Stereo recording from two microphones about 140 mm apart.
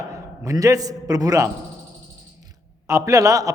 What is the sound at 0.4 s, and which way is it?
A man's voice, 25° right (ahead or behind).